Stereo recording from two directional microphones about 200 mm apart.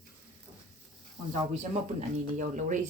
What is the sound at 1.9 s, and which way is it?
Speech, 40° right (ahead or behind).